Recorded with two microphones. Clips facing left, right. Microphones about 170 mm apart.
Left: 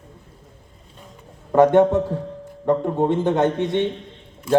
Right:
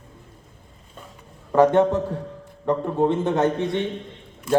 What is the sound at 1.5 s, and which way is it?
A man's voice, 20° left (ahead or behind).